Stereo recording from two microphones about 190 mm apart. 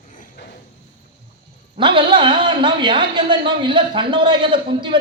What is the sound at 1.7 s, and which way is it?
A man's voice, 25° right (ahead or behind).